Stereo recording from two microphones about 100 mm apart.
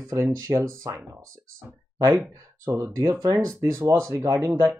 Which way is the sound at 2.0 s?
30° right (ahead or behind).